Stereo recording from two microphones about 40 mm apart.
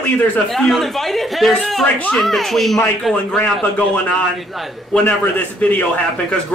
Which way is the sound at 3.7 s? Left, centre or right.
Left.